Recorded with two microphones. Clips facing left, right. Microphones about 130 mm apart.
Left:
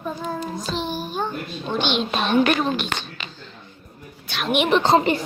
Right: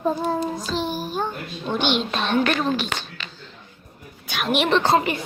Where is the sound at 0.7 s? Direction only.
5° right (ahead or behind).